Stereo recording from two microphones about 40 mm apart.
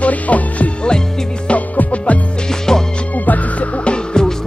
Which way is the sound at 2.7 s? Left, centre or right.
Centre.